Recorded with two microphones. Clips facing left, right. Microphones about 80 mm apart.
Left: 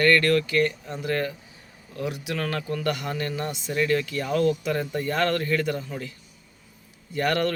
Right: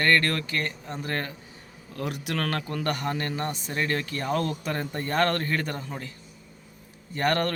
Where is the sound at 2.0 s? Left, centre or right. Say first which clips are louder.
Left 1 dB; right.